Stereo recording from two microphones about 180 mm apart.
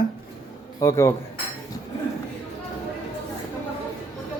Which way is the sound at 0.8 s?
15° left (ahead or behind).